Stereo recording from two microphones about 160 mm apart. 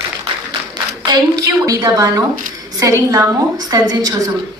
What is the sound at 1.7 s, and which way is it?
A woman's voice, 20° right (ahead or behind).